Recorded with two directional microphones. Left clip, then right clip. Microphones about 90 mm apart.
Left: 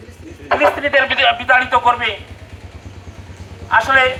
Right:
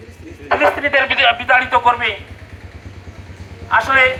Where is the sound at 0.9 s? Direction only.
40° left (ahead or behind).